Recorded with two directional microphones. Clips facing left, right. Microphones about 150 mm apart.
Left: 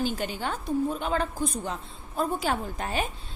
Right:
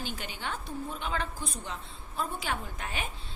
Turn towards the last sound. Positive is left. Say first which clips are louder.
# left 7 dB
turn(degrees=40)  # may be behind; listen again after turning